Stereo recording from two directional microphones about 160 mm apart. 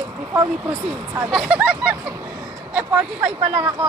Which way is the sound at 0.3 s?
15° right (ahead or behind).